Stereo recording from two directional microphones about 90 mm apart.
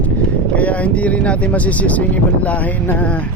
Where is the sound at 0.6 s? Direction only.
15° left (ahead or behind).